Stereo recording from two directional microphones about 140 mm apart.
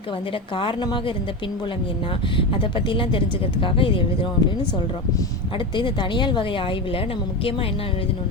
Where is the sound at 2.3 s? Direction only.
40° left (ahead or behind).